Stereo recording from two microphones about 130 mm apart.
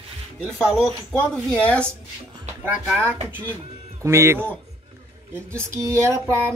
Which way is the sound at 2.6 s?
15° right (ahead or behind).